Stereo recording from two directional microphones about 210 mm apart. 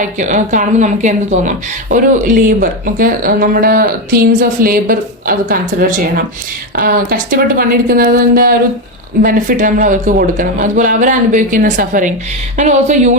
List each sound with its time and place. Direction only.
0.0 s speech: 35° right (ahead or behind)
6.7 s a woman's voice: 45° right (ahead or behind)